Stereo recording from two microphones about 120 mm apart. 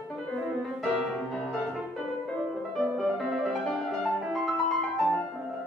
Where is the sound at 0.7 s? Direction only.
Centre (ahead or behind).